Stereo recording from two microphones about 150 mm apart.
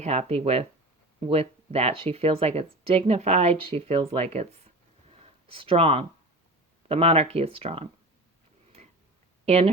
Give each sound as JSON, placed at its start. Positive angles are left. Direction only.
{"t": 0.0, "sound": "speech", "side_deg": -45}